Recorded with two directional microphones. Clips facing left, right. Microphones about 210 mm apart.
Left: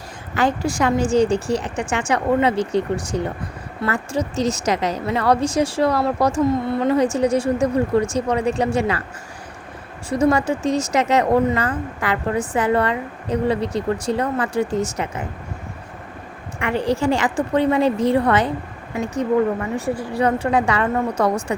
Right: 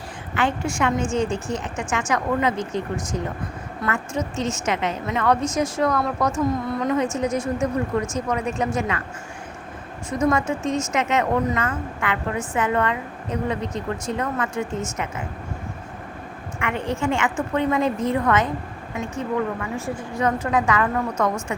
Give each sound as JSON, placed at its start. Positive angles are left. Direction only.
{"t": 0.3, "sound": "a woman's voice", "side_deg": 35}
{"t": 10.1, "sound": "a woman's voice", "side_deg": 30}
{"t": 16.6, "sound": "a woman's voice", "side_deg": 35}